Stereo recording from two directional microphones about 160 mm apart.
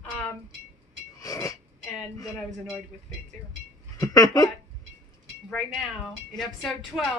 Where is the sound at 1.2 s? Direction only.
20° left (ahead or behind).